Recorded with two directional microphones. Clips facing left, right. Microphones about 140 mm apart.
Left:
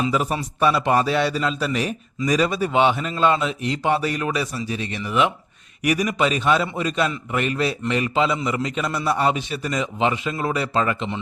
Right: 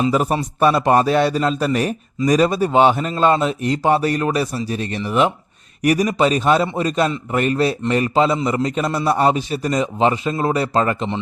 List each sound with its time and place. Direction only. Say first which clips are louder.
0.0 s a man's voice: right 4 dB; 45° right (ahead or behind)